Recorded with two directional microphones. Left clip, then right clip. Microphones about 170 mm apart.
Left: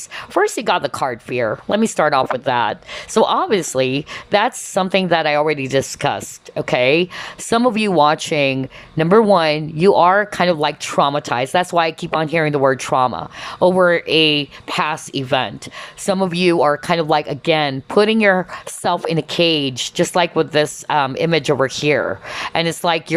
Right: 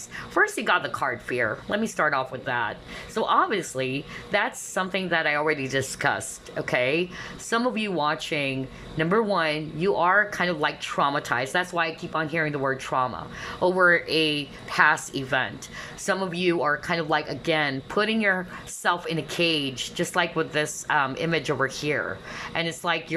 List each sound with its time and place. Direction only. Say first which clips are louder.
0.3 s speech: left 5 dB; 25° left (ahead or behind)